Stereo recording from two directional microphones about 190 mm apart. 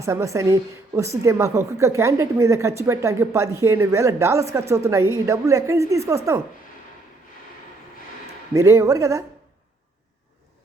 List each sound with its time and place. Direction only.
0.0 s a woman's voice: 15° right (ahead or behind)
8.5 s a woman's voice: 15° right (ahead or behind)